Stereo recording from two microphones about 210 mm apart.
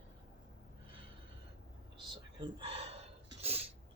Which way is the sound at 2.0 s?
25° right (ahead or behind).